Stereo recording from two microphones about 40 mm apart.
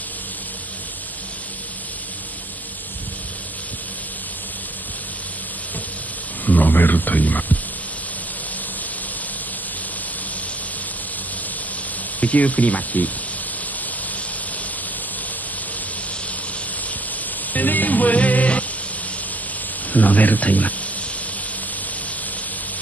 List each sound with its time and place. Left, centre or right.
6.4 s speech: left
12.2 s speech: left
17.5 s music: left
19.9 s speech: left